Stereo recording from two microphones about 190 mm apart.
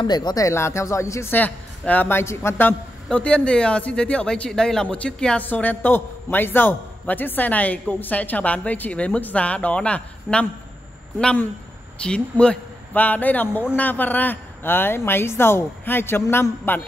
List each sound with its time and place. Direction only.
0.0 s speech: 20° left (ahead or behind)